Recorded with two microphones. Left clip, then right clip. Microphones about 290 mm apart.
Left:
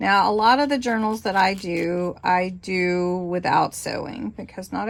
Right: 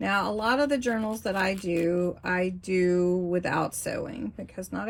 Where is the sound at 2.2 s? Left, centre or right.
Left.